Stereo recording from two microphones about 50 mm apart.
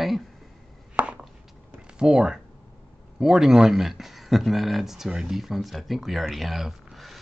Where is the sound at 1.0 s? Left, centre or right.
Right.